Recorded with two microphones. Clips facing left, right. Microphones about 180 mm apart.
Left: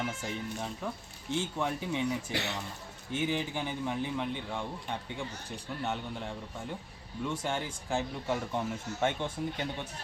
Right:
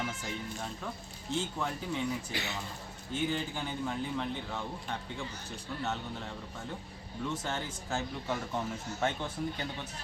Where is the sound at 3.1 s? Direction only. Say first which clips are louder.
Left 2 dB; 10° left (ahead or behind).